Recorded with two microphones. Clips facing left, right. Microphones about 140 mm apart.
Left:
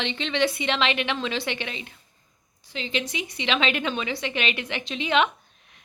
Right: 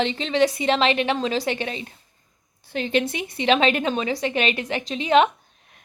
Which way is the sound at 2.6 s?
50° right (ahead or behind).